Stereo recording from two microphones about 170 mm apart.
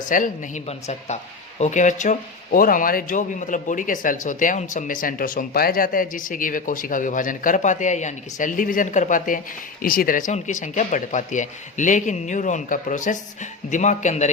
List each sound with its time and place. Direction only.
0.0 s speech: 50° left (ahead or behind)